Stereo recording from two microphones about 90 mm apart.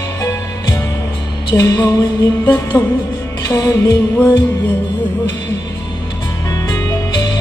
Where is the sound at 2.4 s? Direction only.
20° left (ahead or behind).